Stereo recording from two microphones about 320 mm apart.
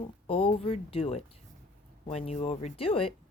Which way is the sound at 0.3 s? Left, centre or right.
Centre.